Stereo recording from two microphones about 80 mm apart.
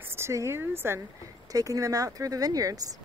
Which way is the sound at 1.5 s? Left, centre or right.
Right.